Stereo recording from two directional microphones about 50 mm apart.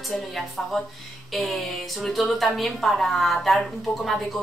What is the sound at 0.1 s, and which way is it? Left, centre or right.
A woman's voice, centre.